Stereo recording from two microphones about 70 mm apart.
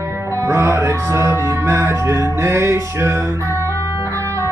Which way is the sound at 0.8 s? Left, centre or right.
Right.